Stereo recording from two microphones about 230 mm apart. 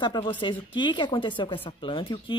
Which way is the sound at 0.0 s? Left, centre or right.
Centre.